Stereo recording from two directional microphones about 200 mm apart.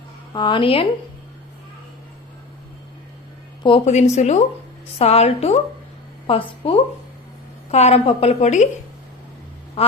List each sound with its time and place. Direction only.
0.3 s a woman's voice: 25° left (ahead or behind)
3.6 s a woman's voice: 30° left (ahead or behind)
9.8 s a woman's voice: 30° left (ahead or behind)